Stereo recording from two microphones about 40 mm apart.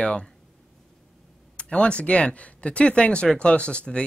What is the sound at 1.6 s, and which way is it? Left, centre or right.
Speech, left.